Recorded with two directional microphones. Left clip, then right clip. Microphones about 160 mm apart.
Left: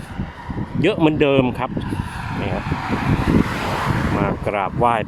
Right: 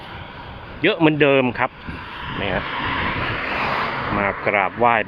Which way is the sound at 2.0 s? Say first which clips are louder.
Left 1 dB; 45° left (ahead or behind).